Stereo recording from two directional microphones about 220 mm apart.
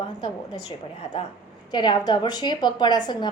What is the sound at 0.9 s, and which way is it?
A woman's voice, 25° left (ahead or behind).